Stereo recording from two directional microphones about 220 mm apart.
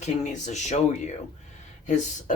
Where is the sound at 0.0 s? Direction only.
30° left (ahead or behind).